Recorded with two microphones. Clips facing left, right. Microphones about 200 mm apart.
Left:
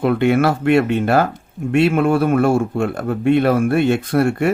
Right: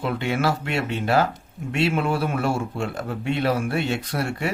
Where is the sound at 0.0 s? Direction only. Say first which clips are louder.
Left 9 dB; 55° left (ahead or behind).